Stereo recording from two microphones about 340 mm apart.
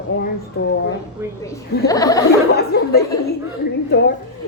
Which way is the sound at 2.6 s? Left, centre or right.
Left.